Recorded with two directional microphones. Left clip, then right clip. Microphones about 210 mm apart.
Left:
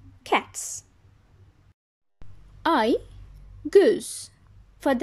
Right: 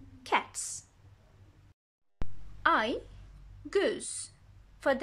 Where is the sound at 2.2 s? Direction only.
Centre (ahead or behind).